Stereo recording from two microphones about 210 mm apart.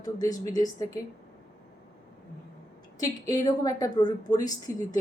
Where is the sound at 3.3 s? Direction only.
15° left (ahead or behind).